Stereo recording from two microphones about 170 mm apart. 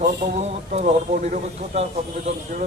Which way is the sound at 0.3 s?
45° right (ahead or behind).